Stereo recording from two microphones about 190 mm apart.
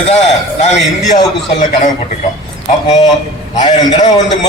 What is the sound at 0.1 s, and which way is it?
A man's voice, 35° left (ahead or behind).